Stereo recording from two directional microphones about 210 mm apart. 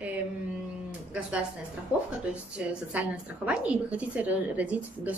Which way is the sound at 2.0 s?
5° right (ahead or behind).